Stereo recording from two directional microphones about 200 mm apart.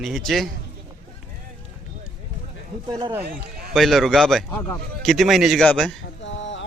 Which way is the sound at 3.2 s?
45° right (ahead or behind).